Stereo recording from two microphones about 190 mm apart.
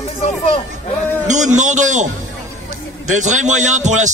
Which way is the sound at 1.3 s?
40° right (ahead or behind).